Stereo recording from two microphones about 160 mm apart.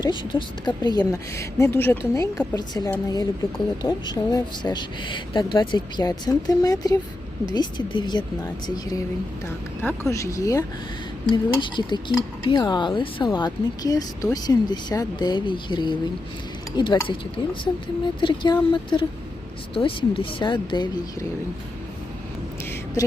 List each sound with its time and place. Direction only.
0.0 s speech: 30° left (ahead or behind)
9.8 s speech: 15° left (ahead or behind)